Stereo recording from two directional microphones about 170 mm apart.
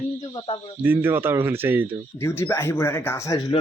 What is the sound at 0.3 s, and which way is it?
Speech, 30° left (ahead or behind).